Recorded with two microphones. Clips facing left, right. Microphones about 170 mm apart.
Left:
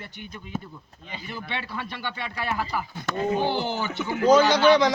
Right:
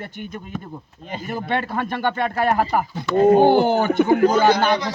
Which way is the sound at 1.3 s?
50° right (ahead or behind).